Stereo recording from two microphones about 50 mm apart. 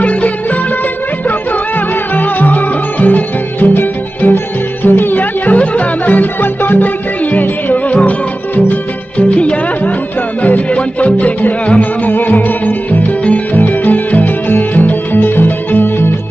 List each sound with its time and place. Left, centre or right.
0.0 s music: left
2.1 s music: left
9.4 s music: left